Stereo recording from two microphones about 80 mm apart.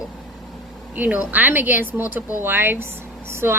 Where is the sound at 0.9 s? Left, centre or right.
Right.